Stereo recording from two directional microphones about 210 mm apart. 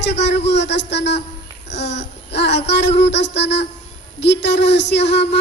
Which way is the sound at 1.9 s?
55° left (ahead or behind).